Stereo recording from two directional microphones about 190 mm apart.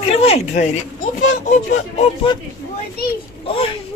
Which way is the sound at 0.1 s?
30° left (ahead or behind).